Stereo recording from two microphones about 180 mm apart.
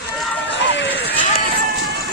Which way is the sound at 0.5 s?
85° left.